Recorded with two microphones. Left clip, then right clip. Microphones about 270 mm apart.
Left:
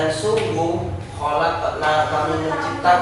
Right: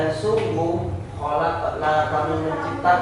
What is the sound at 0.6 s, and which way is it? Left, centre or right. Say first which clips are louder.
Speech: left 2 dB; right.